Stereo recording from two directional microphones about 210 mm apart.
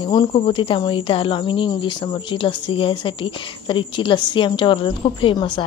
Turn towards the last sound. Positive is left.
turn(degrees=25)  # may be behind; listen again after turning